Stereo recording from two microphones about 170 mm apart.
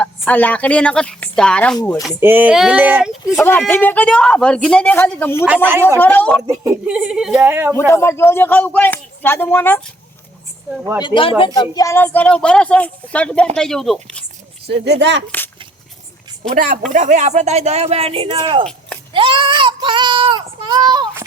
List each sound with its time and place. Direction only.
0.0 s a woman's voice: 10° left (ahead or behind)
2.2 s speech: 10° right (ahead or behind)
3.3 s speech: 10° left (ahead or behind)
6.8 s a woman's voice: 5° right (ahead or behind)
7.9 s speech: 15° left (ahead or behind)
11.0 s a woman's voice: 30° left (ahead or behind); by 14.2 s centre (ahead or behind)
14.7 s speech: 90° right
16.6 s speech: 55° right (ahead or behind); by 18.7 s 25° right (ahead or behind)
19.1 s child singing: 30° right (ahead or behind)